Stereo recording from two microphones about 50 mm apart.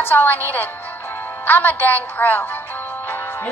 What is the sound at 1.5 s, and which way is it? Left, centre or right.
Speech, left.